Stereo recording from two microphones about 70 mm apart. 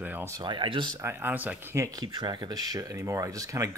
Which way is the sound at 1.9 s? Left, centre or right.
Right.